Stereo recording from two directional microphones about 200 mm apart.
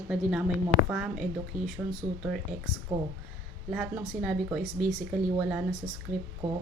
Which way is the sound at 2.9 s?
25° right (ahead or behind).